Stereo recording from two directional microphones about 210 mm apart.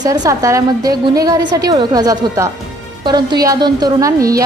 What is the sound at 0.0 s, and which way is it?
A woman's voice, 15° right (ahead or behind).